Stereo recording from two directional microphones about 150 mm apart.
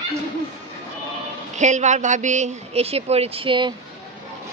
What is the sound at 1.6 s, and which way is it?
A woman's voice, 50° right (ahead or behind).